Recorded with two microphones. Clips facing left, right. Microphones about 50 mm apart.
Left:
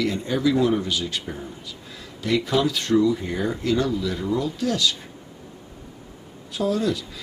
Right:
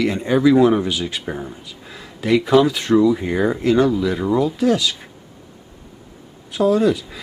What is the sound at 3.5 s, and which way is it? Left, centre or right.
Speech, right.